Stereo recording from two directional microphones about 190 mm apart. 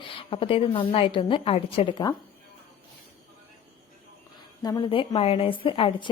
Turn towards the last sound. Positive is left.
turn(degrees=25)  # may be behind; listen again after turning